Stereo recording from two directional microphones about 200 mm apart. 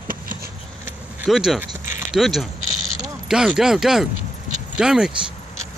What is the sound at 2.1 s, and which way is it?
Speech, centre (ahead or behind).